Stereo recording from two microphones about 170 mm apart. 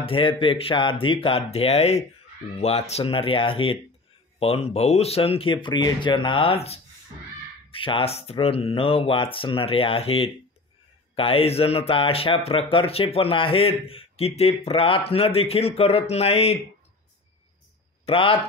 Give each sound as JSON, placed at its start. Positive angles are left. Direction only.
{"t": 0.0, "sound": "speech", "side_deg": 30}
{"t": 18.0, "sound": "speech", "side_deg": 30}